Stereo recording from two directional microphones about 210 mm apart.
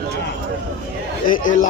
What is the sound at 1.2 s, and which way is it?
Speech, 40° left (ahead or behind).